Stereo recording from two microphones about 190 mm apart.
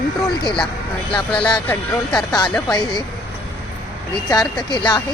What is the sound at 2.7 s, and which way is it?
Speech, 20° left (ahead or behind).